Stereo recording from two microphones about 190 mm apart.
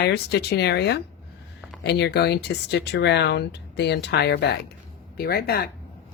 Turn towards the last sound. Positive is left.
turn(degrees=55)  # may be behind; listen again after turning